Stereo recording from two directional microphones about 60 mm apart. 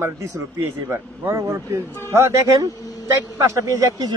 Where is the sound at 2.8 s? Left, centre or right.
Left.